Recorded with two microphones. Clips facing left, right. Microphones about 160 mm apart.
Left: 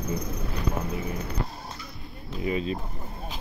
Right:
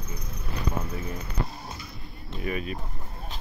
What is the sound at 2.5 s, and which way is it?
Speech, 25° left (ahead or behind).